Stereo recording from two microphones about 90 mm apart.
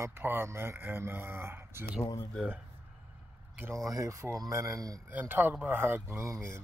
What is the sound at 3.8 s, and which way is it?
Speech, 40° right (ahead or behind).